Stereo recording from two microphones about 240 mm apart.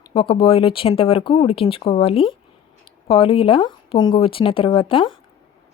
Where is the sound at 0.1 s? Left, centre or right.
Left.